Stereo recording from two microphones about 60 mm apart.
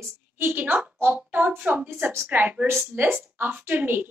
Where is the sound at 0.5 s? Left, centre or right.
Right.